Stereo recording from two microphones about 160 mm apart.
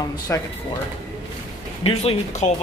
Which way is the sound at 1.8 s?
40° left (ahead or behind).